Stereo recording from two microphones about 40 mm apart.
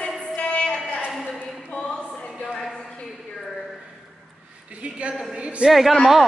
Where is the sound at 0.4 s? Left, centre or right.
Left.